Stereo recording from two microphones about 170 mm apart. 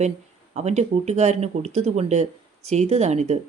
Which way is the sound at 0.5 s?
40° right (ahead or behind).